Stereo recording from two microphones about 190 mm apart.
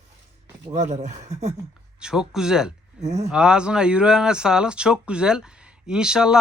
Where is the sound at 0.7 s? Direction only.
35° right (ahead or behind).